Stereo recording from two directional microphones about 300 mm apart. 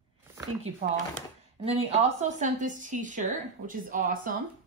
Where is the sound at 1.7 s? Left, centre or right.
Right.